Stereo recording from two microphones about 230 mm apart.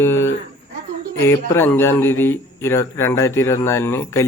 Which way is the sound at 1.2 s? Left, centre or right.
Centre.